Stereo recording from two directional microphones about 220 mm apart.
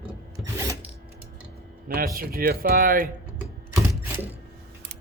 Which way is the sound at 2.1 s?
40° right (ahead or behind).